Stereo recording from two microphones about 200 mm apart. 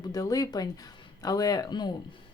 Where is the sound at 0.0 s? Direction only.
20° left (ahead or behind).